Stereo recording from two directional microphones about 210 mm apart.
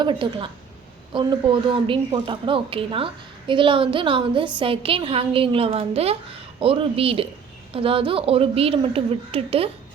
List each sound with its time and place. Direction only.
0.0 s a woman's voice: 25° right (ahead or behind)